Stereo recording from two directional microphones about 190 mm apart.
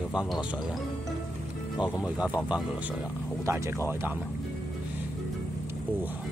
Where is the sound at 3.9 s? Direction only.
10° right (ahead or behind).